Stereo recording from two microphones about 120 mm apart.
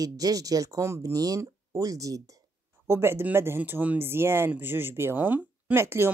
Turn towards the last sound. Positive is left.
turn(degrees=-20)  # may be behind; listen again after turning